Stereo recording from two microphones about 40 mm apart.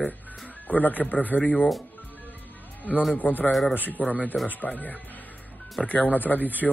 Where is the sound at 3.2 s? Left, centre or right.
Left.